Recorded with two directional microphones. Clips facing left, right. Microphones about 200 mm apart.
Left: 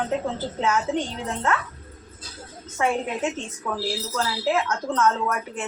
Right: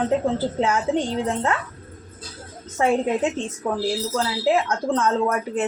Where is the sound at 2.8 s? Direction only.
35° right (ahead or behind).